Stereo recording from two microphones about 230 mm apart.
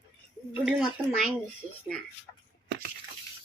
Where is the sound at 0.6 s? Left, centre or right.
Centre.